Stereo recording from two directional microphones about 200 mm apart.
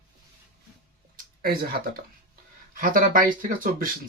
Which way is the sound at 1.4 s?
50° right (ahead or behind).